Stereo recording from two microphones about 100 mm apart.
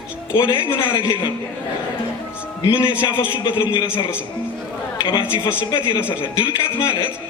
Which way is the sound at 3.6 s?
60° left (ahead or behind).